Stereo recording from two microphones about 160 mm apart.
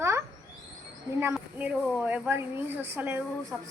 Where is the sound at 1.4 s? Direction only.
10° right (ahead or behind).